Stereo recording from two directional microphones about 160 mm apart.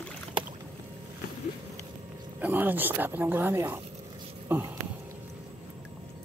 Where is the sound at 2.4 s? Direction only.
10° right (ahead or behind).